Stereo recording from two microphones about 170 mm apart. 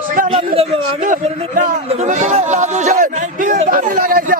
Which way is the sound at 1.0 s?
50° right (ahead or behind).